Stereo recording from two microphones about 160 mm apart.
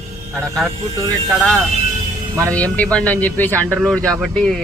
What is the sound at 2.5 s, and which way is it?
Speech, 10° left (ahead or behind).